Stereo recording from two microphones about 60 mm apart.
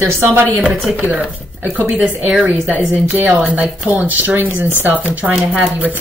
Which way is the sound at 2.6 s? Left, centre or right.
Right.